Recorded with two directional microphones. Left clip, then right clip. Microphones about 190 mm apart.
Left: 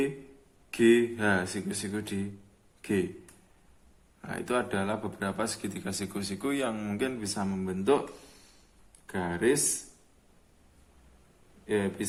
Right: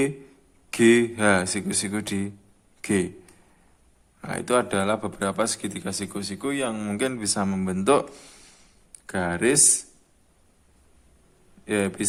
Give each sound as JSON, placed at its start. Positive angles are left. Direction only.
{"t": 0.7, "sound": "speech", "side_deg": -40}
{"t": 4.2, "sound": "speech", "side_deg": -35}
{"t": 9.0, "sound": "speech", "side_deg": -50}
{"t": 11.6, "sound": "speech", "side_deg": -50}